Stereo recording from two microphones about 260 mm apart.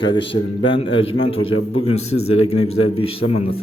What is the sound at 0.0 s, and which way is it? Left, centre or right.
Speech, centre.